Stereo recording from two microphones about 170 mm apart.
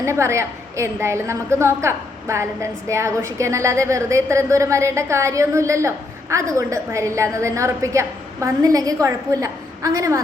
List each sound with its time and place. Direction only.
0.0 s a woman's voice: 15° right (ahead or behind)